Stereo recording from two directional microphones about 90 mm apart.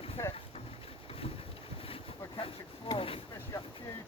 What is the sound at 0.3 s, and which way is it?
Boat, 90° left.